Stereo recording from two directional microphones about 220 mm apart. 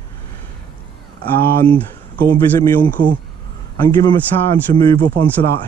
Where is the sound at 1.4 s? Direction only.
10° left (ahead or behind).